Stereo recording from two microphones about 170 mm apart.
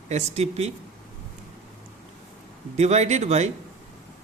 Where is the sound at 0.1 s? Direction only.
40° right (ahead or behind).